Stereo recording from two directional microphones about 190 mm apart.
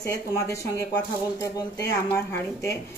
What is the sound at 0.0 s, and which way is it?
Speech, 15° left (ahead or behind).